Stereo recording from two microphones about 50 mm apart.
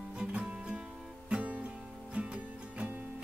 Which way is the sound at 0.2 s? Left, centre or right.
Right.